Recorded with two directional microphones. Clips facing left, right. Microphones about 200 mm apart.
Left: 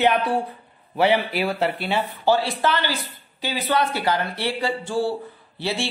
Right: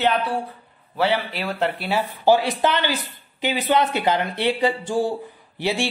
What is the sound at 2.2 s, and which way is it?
Speech, 15° right (ahead or behind).